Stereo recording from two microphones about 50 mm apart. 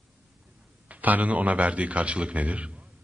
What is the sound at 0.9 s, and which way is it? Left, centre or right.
A man's voice, right.